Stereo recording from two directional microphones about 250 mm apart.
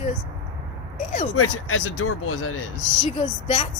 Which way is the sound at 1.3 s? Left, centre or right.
Left.